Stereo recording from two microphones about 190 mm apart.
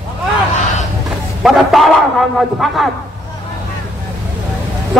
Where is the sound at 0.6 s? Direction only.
40° left (ahead or behind).